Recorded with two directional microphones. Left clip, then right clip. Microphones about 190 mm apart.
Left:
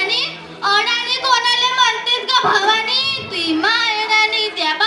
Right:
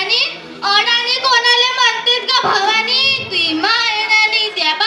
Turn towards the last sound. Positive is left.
turn(degrees=-50)  # may be behind; listen again after turning